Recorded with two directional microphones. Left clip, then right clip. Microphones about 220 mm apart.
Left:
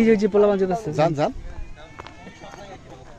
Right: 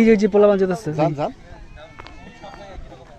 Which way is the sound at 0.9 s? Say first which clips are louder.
Left 3 dB; 40° left (ahead or behind).